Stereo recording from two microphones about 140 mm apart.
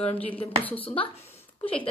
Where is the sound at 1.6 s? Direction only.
40° left (ahead or behind).